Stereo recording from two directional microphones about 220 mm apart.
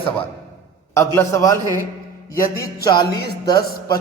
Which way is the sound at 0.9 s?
15° left (ahead or behind).